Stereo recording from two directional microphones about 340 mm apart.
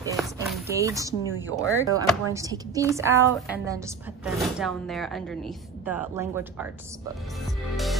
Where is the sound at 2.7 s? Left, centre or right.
Centre.